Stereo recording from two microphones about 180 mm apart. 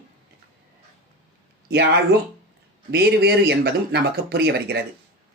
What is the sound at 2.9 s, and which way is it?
Speech, 65° right (ahead or behind).